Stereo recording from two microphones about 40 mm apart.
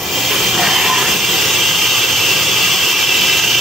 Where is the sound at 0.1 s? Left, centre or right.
Centre.